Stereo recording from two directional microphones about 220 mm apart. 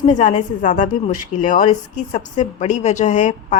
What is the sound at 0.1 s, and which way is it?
A woman's voice, 35° left (ahead or behind).